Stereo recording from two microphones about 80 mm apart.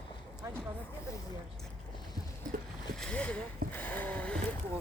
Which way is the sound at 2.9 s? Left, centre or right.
Centre.